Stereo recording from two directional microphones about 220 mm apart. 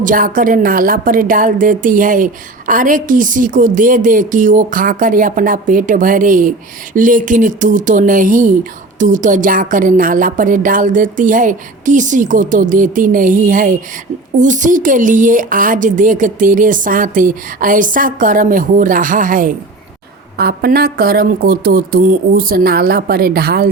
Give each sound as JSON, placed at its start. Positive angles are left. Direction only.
{"t": 0.0, "sound": "a woman's voice", "side_deg": -35}